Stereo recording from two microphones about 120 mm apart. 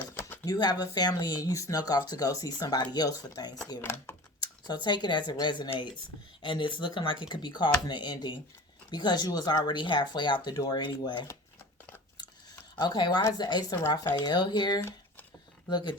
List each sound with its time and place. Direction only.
0.1 s a sound: 15° left (ahead or behind)
0.4 s speech: 35° left (ahead or behind)
3.8 s speech: 20° left (ahead or behind)
4.4 s speech: 35° left (ahead or behind)
12.8 s speech: 35° left (ahead or behind)